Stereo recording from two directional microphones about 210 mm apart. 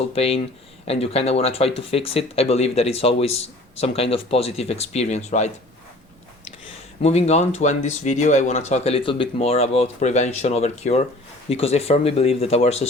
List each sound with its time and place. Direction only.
0.1 s speech: 30° left (ahead or behind)
6.7 s speech: 30° left (ahead or behind)